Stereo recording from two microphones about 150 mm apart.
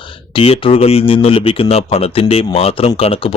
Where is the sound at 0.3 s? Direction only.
40° left (ahead or behind).